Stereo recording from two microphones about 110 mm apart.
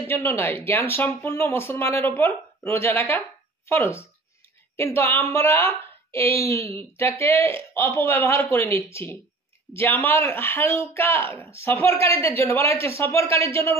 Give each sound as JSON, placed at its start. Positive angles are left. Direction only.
{"t": 0.0, "sound": "speech", "side_deg": 20}